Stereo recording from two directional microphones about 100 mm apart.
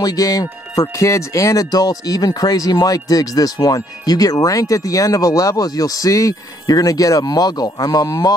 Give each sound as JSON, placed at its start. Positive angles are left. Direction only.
{"t": 0.0, "sound": "speech", "side_deg": 35}